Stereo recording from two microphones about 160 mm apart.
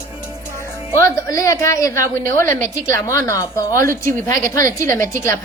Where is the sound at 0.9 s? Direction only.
20° left (ahead or behind).